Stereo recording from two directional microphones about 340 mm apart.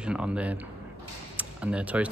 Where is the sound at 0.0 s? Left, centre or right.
Centre.